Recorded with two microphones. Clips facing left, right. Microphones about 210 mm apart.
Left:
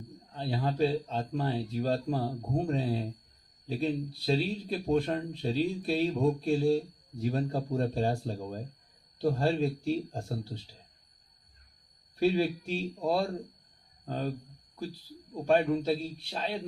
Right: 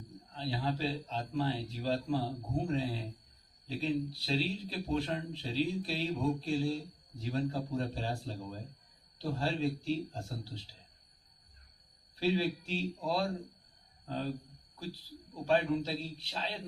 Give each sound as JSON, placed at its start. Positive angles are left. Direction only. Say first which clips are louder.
{"t": 0.3, "sound": "a man's voice", "louder": "left 6 dB", "side_deg": 55}
{"t": 12.2, "sound": "a man's voice", "louder": "left 5 dB", "side_deg": 50}
{"t": 15.4, "sound": "a man's voice", "louder": "left 5 dB", "side_deg": 55}